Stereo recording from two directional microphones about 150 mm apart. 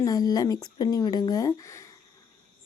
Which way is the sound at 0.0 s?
25° left (ahead or behind).